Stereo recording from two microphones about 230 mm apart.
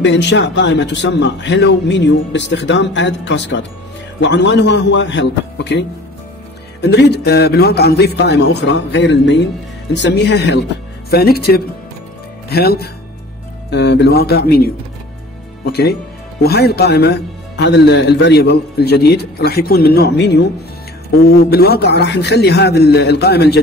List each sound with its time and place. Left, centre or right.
0.0 s a man's voice: left